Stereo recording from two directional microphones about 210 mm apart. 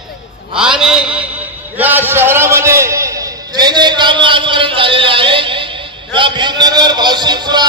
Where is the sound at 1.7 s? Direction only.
10° right (ahead or behind); by 5.6 s 25° right (ahead or behind).